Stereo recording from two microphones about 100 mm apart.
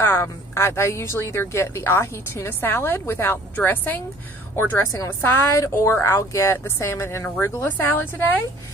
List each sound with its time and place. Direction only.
0.0 s a woman's voice: 25° left (ahead or behind)